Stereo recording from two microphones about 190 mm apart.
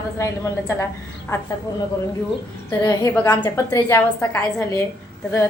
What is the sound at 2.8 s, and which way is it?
A woman's voice, 20° left (ahead or behind).